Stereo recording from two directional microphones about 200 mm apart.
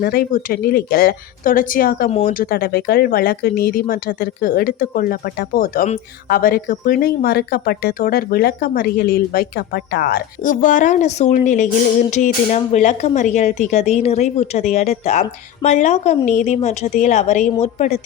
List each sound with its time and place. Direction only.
0.0 s speech: 50° left (ahead or behind)
2.0 s speech: 30° left (ahead or behind)
2.3 s speech: 50° left (ahead or behind); by 18.0 s 35° left (ahead or behind)